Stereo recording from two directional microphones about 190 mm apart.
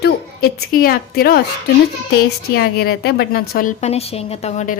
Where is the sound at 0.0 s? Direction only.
50° left (ahead or behind).